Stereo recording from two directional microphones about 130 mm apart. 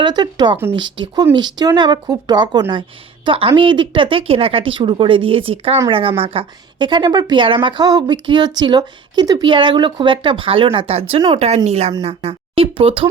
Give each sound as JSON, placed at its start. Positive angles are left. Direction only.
{"t": 0.0, "sound": "a woman's voice", "side_deg": -35}